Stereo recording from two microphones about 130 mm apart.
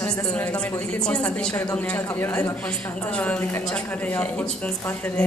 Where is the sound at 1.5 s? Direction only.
15° left (ahead or behind).